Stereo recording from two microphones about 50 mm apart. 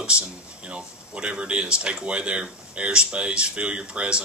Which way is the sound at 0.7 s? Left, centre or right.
Centre.